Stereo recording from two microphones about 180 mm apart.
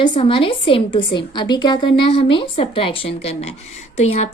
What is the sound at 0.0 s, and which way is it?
A woman's voice, 25° left (ahead or behind).